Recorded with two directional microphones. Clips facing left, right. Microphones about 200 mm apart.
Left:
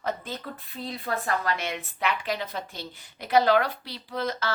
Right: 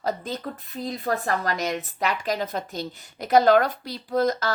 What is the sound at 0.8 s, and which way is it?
A woman's voice, 40° right (ahead or behind).